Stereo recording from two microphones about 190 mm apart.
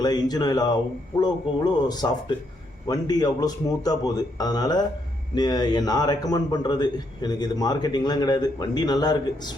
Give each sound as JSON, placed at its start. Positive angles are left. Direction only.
{"t": 0.0, "sound": "a man's voice", "side_deg": 20}